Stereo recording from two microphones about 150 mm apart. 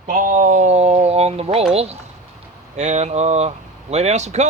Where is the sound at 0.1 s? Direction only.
65° right (ahead or behind); by 1.5 s 45° right (ahead or behind).